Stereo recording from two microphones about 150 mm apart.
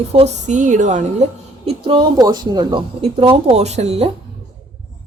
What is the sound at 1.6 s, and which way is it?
Speech, 35° right (ahead or behind).